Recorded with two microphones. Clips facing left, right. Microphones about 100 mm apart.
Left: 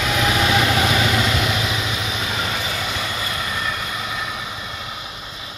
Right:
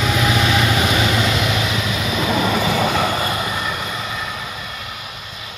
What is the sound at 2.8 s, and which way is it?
Vehicle, 75° right (ahead or behind).